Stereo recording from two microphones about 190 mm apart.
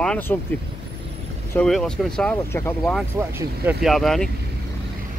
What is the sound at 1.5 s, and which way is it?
Speech, 5° left (ahead or behind).